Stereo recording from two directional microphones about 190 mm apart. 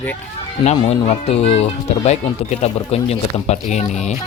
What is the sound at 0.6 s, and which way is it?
Speech, 35° left (ahead or behind).